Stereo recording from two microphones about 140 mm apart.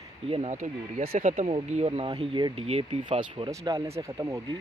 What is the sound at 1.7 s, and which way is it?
Speech, 50° right (ahead or behind).